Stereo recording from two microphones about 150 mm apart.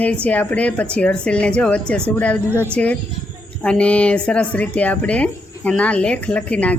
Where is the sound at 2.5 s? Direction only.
15° right (ahead or behind).